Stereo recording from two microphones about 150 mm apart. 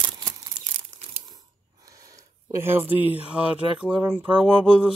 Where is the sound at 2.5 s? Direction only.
15° right (ahead or behind).